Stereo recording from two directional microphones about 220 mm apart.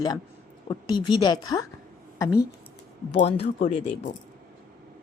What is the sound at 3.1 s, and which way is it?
Speech, 30° left (ahead or behind).